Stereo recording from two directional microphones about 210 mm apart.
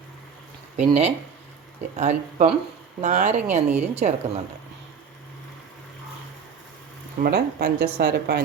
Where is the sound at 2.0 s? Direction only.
35° right (ahead or behind).